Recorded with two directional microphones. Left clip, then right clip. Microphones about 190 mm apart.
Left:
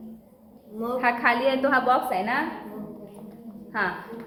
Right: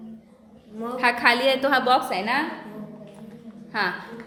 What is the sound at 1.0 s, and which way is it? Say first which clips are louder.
A woman's voice: right 3 dB; 60° right (ahead or behind).